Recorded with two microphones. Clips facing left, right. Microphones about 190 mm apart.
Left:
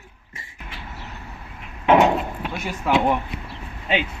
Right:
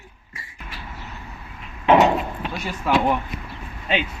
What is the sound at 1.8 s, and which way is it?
Wood, 10° left (ahead or behind).